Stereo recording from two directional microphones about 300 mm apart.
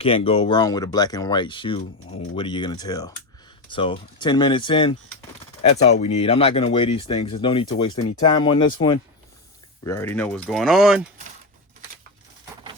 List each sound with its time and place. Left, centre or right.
0.0 s speech: centre